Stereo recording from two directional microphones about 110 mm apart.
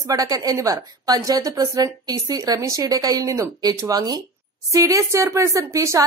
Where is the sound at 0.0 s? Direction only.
35° right (ahead or behind).